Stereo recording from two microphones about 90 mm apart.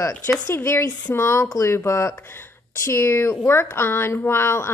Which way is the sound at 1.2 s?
40° left (ahead or behind).